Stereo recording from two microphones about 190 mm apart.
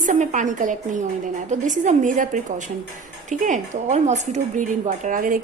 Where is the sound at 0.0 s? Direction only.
40° right (ahead or behind).